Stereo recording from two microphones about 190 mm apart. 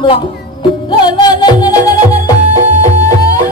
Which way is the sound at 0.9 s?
25° left (ahead or behind).